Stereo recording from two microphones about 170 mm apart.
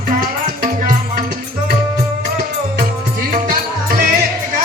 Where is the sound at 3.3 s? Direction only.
55° right (ahead or behind).